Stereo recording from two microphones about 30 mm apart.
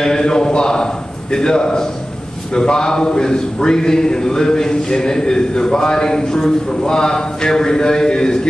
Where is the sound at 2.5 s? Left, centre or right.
Left.